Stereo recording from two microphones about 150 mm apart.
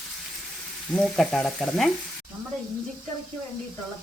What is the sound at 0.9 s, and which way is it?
Frying, centre (ahead or behind).